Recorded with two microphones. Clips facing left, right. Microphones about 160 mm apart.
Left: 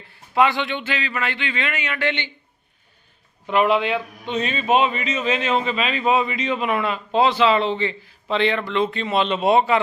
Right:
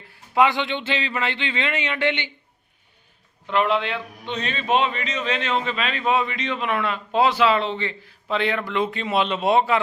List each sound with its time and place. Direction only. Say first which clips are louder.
0.1 s speech: even; 15° right (ahead or behind)
3.4 s a man's voice: left 3 dB; 10° left (ahead or behind)